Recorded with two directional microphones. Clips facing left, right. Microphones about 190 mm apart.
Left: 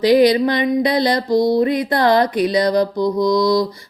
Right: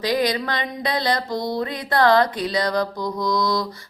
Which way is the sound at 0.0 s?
20° left (ahead or behind).